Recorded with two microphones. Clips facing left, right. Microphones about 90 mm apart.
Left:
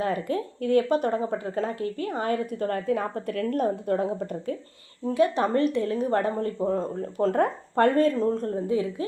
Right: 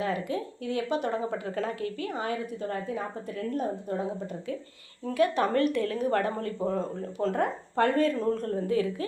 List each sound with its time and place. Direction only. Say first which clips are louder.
0.0 s speech: left 3 dB; 45° left (ahead or behind)
5.0 s speech: left 2 dB; 25° left (ahead or behind)
6.7 s speech: left 3 dB; 40° left (ahead or behind)
8.2 s speech: left 3 dB; 25° left (ahead or behind)